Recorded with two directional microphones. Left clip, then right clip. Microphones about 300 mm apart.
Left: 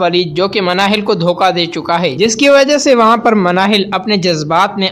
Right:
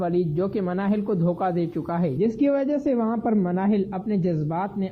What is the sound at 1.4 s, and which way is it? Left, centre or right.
A man's voice, centre.